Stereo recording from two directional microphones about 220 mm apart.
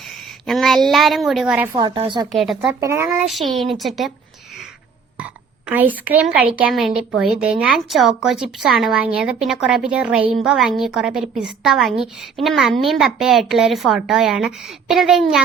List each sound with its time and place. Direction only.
0.0 s a woman's voice: centre (ahead or behind)
1.7 s a woman's voice: 20° right (ahead or behind)
2.3 s a woman's voice: centre (ahead or behind)
2.8 s speech: 15° right (ahead or behind)
3.2 s a woman's voice: centre (ahead or behind)
5.1 s a woman's voice: 5° right (ahead or behind)